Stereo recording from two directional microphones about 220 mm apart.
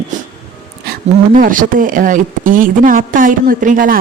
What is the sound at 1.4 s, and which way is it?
Speech, 40° right (ahead or behind).